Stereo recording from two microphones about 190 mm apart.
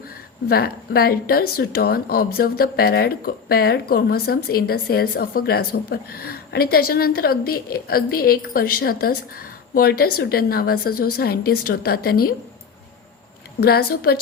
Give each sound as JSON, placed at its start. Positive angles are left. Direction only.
{"t": 0.4, "sound": "speech", "side_deg": 55}
{"t": 13.6, "sound": "a woman's voice", "side_deg": 55}